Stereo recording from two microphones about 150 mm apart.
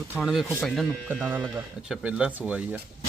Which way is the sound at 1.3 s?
15° right (ahead or behind).